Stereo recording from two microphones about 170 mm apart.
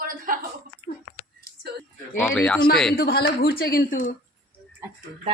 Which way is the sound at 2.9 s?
70° left (ahead or behind).